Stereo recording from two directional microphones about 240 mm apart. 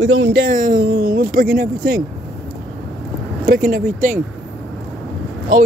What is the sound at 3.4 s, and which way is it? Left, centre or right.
Speech, right.